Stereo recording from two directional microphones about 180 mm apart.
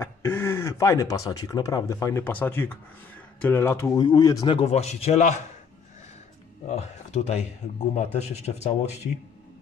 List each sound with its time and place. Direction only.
0.0 s speech: 15° left (ahead or behind)
4.6 s speech: 35° left (ahead or behind)
6.7 s speech: 35° left (ahead or behind)